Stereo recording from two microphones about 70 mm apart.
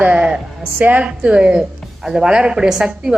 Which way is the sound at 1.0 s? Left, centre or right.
Centre.